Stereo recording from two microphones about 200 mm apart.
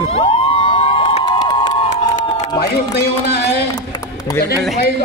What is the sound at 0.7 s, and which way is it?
Crowd, 25° left (ahead or behind).